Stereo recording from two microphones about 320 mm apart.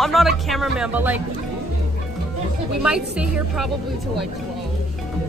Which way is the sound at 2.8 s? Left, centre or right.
Centre.